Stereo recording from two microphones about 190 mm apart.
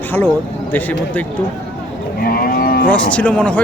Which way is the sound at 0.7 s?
10° left (ahead or behind).